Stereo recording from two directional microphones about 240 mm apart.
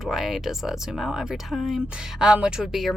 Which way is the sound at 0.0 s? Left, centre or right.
Centre.